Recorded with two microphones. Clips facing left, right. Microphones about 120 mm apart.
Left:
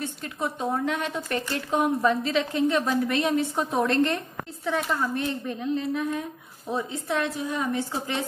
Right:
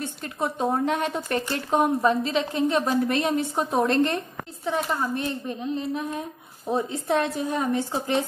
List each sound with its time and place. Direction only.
0.2 s a woman's voice: 35° right (ahead or behind)
6.7 s speech: 40° right (ahead or behind)